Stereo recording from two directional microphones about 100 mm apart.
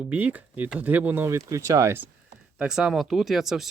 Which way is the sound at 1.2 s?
30° right (ahead or behind).